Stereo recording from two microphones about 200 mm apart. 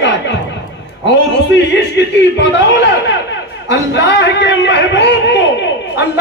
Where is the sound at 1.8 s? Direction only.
60° left (ahead or behind).